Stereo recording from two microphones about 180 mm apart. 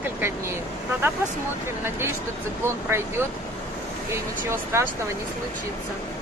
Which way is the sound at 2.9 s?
15° right (ahead or behind).